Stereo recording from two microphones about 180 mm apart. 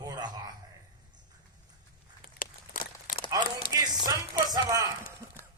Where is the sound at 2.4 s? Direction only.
70° left (ahead or behind).